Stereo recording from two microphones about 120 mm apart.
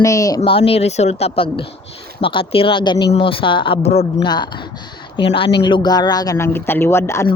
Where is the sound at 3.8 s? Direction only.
65° left (ahead or behind).